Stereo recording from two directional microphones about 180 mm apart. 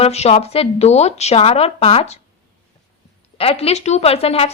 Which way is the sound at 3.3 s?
35° left (ahead or behind).